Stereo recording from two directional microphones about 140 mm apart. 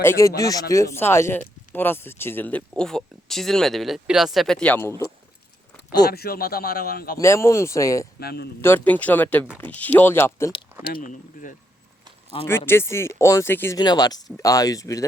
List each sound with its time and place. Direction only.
0.0 s speech: 20° left (ahead or behind)
6.1 s speech: 90° left
7.2 s speech: 20° left (ahead or behind)
10.8 s speech: 80° left
12.5 s speech: 15° left (ahead or behind)
13.7 s speech: 30° left (ahead or behind)